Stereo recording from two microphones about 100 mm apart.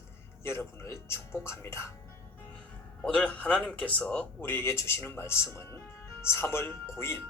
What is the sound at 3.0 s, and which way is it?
Speech, 10° left (ahead or behind).